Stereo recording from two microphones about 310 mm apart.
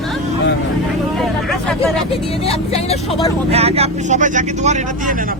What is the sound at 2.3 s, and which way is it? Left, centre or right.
Speech, centre.